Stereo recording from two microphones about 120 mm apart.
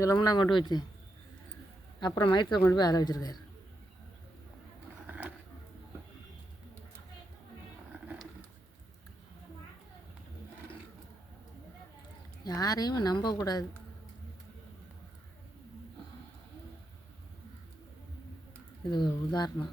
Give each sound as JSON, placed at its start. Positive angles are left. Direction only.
{"t": 0.0, "sound": "a woman's voice", "side_deg": 30}
{"t": 2.0, "sound": "a woman's voice", "side_deg": 40}
{"t": 5.0, "sound": "a sound", "side_deg": -15}
{"t": 12.5, "sound": "a woman's voice", "side_deg": 30}
{"t": 18.9, "sound": "a woman's voice", "side_deg": 40}